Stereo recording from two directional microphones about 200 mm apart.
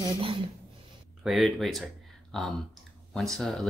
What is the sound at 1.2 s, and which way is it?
Speech, centre (ahead or behind).